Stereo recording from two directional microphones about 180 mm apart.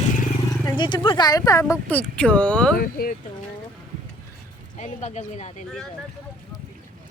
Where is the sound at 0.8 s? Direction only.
25° left (ahead or behind); by 2.7 s 5° left (ahead or behind).